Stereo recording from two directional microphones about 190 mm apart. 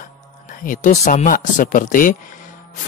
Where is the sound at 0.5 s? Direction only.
45° left (ahead or behind).